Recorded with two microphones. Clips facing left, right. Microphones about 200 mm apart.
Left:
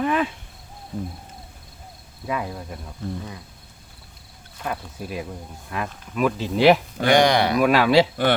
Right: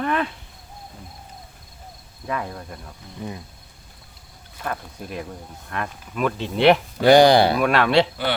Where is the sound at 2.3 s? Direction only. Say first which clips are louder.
Left 1 dB; 10° left (ahead or behind).